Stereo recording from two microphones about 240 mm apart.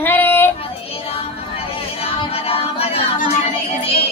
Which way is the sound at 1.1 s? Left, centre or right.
Left.